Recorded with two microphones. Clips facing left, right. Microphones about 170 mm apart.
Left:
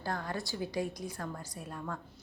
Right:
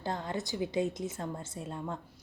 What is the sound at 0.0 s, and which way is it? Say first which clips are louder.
A woman's voice: right 2 dB; 20° right (ahead or behind).